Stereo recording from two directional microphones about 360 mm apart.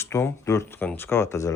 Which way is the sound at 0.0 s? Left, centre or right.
Centre.